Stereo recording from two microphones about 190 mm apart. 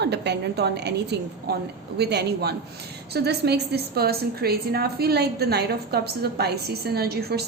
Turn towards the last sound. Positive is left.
turn(degrees=-55)  # may be behind; listen again after turning